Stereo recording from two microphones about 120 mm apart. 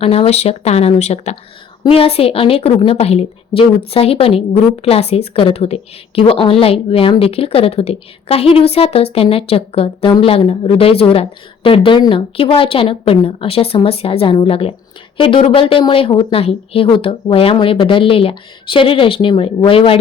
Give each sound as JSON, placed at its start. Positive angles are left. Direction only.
{"t": 0.0, "sound": "speech", "side_deg": 55}
{"t": 1.9, "sound": "a woman's voice", "side_deg": 55}